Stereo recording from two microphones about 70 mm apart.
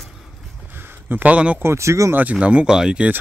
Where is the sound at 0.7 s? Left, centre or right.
Right.